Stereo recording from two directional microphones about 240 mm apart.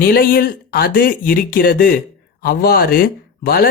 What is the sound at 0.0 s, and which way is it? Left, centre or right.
Speech, left.